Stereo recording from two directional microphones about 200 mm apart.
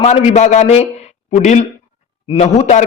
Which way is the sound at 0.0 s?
35° left (ahead or behind).